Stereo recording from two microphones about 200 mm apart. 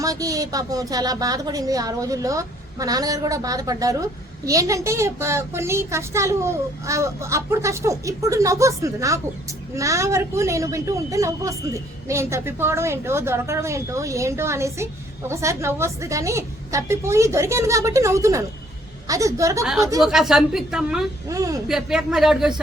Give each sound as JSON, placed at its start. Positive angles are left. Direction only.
{"t": 0.0, "sound": "a woman's voice", "side_deg": -15}
{"t": 19.6, "sound": "a woman's voice", "side_deg": 0}
{"t": 21.2, "sound": "a woman's voice", "side_deg": -15}
{"t": 21.7, "sound": "a woman's voice", "side_deg": -5}